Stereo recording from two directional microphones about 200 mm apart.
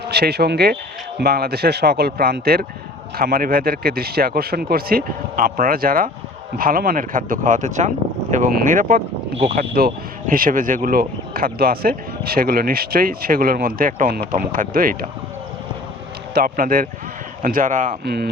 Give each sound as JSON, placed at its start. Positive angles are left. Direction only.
{"t": 0.1, "sound": "speech", "side_deg": -55}
{"t": 16.3, "sound": "speech", "side_deg": -45}
{"t": 18.0, "sound": "speech", "side_deg": -55}